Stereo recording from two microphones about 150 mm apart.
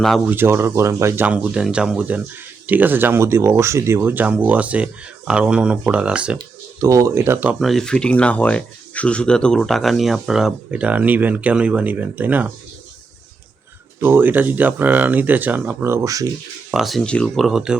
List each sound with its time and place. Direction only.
0.3 s speech: 15° right (ahead or behind)
6.7 s speech: 20° right (ahead or behind)
7.6 s speech: centre (ahead or behind)
14.0 s speech: 15° right (ahead or behind)
16.7 s speech: centre (ahead or behind)